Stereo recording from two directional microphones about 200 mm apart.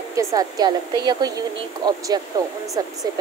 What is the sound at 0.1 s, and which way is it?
Speech, 15° right (ahead or behind).